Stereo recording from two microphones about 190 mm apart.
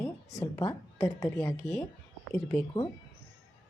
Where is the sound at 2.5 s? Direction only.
5° left (ahead or behind).